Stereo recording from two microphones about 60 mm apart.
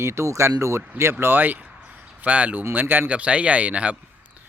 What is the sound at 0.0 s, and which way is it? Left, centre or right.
Speech, right.